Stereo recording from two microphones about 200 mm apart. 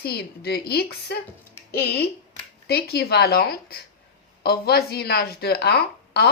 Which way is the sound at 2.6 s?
50° left (ahead or behind).